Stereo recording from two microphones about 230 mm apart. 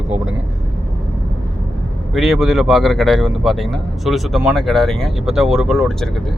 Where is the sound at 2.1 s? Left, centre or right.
Centre.